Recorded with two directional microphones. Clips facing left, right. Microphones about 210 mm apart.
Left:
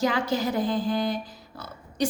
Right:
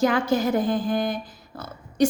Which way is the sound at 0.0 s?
50° right (ahead or behind).